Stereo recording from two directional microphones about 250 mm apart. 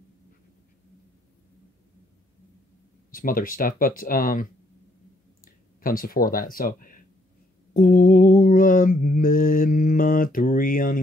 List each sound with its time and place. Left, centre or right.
3.1 s speech: left
7.7 s mantra: left